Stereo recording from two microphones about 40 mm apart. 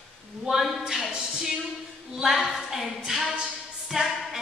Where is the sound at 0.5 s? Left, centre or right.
Centre.